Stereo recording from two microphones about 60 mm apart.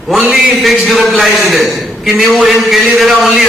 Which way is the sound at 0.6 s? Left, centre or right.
Centre.